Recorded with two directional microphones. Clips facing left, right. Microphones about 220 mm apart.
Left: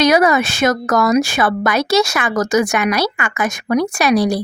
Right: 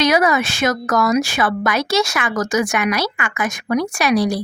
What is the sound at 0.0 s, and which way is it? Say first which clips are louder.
Speech: left 3 dB; 40° left (ahead or behind).